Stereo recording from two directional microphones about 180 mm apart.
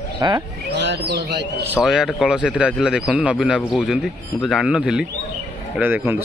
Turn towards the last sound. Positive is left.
turn(degrees=-10)  # may be behind; listen again after turning